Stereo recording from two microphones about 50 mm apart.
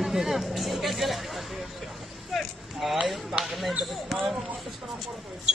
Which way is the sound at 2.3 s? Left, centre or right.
Centre.